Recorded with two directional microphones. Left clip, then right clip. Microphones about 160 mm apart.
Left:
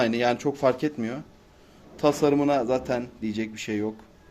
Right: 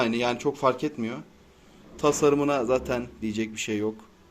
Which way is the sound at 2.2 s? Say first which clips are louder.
Right 1 dB; 25° left (ahead or behind).